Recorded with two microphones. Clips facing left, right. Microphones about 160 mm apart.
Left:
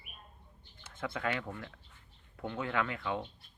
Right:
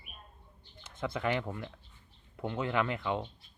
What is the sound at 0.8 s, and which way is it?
Speech, 20° right (ahead or behind).